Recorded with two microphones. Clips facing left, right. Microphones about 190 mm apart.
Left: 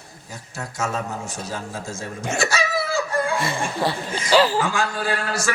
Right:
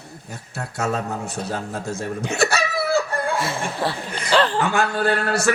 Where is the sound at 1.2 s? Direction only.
60° right (ahead or behind).